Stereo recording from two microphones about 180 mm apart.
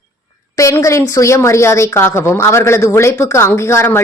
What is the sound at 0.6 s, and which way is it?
A woman's voice, 15° left (ahead or behind).